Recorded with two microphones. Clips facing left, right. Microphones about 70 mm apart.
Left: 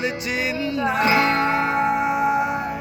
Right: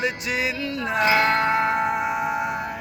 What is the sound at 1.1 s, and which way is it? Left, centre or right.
Music, right.